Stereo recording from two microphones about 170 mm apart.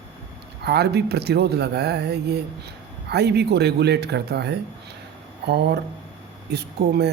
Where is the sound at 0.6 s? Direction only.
75° right (ahead or behind).